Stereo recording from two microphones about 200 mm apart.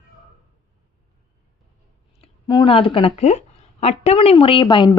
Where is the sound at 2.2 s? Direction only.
25° left (ahead or behind).